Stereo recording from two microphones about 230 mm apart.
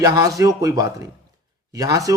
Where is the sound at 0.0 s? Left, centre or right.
Centre.